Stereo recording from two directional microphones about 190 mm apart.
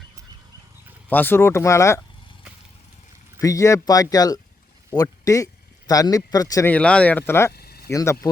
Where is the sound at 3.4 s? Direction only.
15° left (ahead or behind).